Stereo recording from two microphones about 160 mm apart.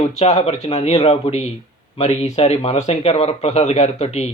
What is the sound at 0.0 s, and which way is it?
Speech, 45° left (ahead or behind).